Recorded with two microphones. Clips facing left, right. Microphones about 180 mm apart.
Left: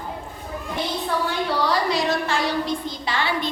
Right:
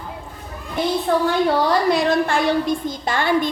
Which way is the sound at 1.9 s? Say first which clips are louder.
Right 5 dB; 55° right (ahead or behind).